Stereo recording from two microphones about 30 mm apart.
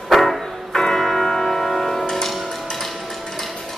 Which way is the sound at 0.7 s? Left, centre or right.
Centre.